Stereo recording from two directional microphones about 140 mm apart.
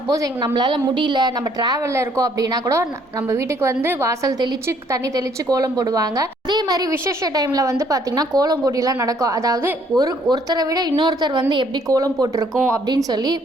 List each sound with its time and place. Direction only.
0.1 s a woman's voice: 30° right (ahead or behind)